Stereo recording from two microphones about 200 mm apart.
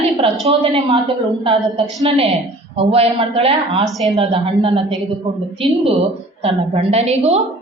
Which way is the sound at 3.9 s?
Centre (ahead or behind).